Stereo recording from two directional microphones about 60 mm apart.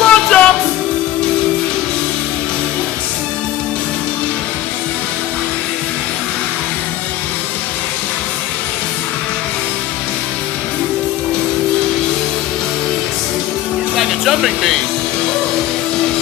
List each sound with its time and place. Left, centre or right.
0.0 s music: centre
13.9 s music: centre